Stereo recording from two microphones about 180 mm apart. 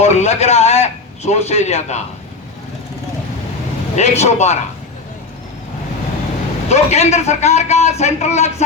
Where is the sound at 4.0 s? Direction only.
40° left (ahead or behind).